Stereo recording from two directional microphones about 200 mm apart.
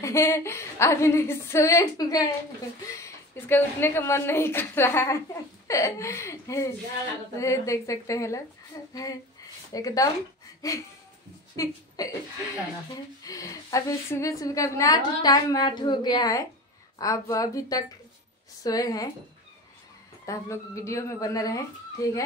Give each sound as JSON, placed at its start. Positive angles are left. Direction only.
{"t": 0.0, "sound": "a woman's voice", "side_deg": 15}
{"t": 13.2, "sound": "a woman's voice", "side_deg": 15}
{"t": 20.2, "sound": "a woman's voice", "side_deg": 15}